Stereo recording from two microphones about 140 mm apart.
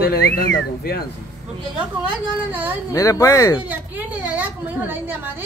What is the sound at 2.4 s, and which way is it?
Speech, 10° right (ahead or behind).